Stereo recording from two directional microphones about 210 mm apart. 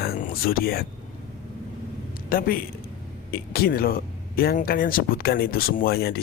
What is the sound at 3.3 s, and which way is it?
Speech, 45° left (ahead or behind).